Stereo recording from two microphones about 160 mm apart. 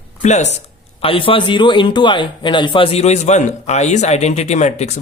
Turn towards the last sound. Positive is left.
turn(degrees=45)  # may be behind; listen again after turning